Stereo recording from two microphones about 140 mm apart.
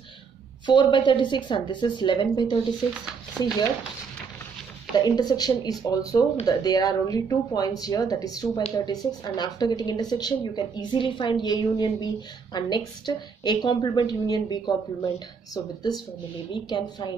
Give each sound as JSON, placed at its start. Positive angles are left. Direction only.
{"t": 0.7, "sound": "a woman's voice", "side_deg": 35}
{"t": 4.9, "sound": "a woman's voice", "side_deg": 30}